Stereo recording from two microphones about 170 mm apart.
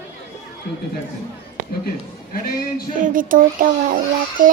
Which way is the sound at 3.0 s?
55° right (ahead or behind).